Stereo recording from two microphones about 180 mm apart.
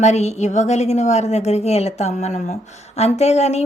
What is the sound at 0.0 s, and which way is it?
A woman's voice, 40° left (ahead or behind).